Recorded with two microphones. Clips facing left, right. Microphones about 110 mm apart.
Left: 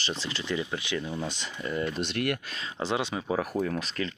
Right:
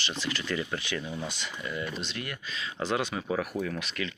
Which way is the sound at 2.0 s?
60° left (ahead or behind).